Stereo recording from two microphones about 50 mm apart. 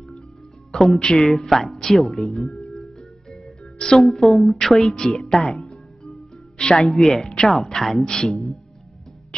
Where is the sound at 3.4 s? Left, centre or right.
Centre.